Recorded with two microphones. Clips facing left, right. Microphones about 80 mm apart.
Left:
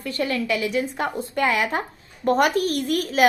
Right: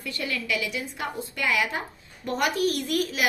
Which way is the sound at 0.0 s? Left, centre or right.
Left.